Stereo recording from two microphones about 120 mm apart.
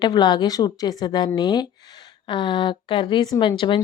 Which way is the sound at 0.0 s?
35° left (ahead or behind).